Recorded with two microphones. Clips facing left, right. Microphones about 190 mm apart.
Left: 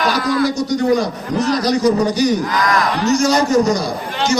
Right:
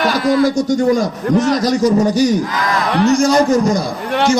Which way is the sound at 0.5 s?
45° right (ahead or behind).